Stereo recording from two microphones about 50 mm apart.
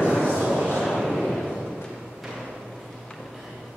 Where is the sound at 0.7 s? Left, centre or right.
Centre.